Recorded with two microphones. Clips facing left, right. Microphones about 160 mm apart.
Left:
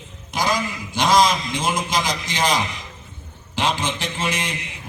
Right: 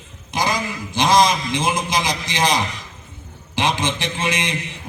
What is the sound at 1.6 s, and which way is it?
A man's voice, 15° right (ahead or behind).